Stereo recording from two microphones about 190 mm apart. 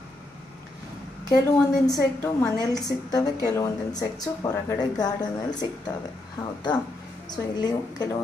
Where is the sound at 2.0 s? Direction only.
15° left (ahead or behind).